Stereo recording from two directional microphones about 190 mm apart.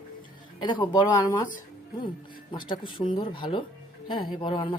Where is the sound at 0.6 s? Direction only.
25° left (ahead or behind).